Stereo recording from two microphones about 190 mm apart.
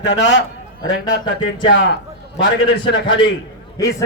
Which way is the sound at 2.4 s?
70° left (ahead or behind).